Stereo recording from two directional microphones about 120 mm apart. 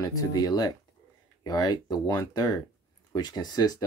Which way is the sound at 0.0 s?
30° left (ahead or behind).